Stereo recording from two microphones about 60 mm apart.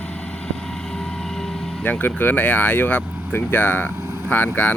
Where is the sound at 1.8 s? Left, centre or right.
Left.